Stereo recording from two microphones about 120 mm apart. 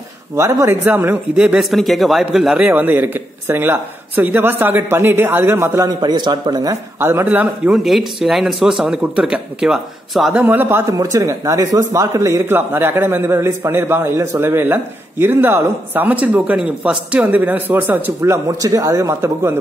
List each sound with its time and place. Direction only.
0.4 s a man's voice: 25° right (ahead or behind)
5.9 s speech: 35° right (ahead or behind)
7.0 s a man's voice: 20° right (ahead or behind)
7.7 s a man's voice: centre (ahead or behind)
10.4 s a man's voice: 15° right (ahead or behind)
10.9 s speech: 30° right (ahead or behind)